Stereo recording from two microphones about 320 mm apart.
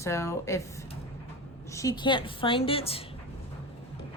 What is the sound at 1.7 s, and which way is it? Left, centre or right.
A woman's voice, centre.